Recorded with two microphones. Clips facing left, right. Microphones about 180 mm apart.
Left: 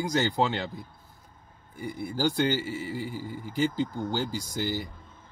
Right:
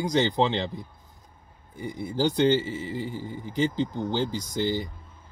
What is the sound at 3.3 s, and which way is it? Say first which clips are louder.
Speech: right 1 dB; 20° right (ahead or behind).